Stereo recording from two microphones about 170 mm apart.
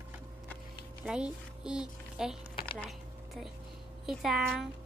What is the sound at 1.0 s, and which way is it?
Speech, 5° right (ahead or behind).